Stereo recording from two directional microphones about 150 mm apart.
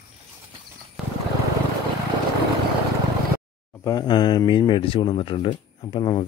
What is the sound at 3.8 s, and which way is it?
Speech, 25° left (ahead or behind).